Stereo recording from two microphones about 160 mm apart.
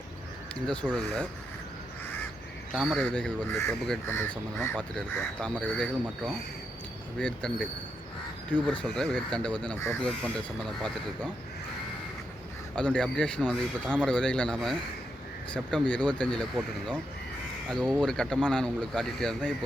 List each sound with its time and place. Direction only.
0.9 s speech: centre (ahead or behind)
2.7 s speech: 5° left (ahead or behind)
12.7 s speech: 5° left (ahead or behind)
18.0 s speech: 5° left (ahead or behind)